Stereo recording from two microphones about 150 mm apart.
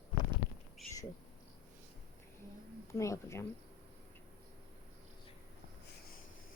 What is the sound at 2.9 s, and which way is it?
Speech, 20° left (ahead or behind).